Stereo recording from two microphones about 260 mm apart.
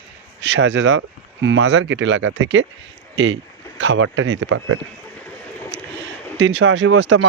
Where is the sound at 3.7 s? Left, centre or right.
Right.